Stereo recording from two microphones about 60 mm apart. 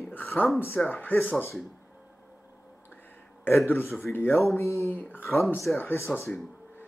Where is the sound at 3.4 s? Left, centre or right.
Left.